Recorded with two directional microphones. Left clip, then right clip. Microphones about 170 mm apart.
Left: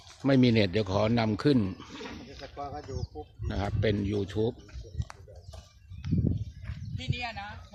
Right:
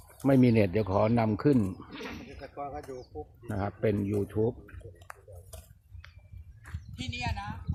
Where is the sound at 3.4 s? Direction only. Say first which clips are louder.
Even; centre (ahead or behind).